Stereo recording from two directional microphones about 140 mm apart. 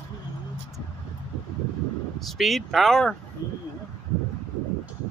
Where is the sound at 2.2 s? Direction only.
Centre (ahead or behind).